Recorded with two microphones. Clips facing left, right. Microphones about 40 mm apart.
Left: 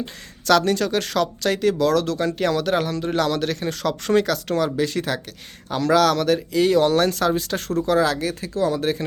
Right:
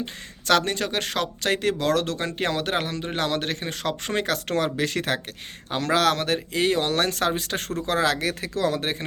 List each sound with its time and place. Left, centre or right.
0.0 s speech: right
4.3 s speech: right
8.8 s speech: right